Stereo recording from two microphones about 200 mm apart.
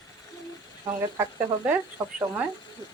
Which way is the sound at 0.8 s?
15° right (ahead or behind).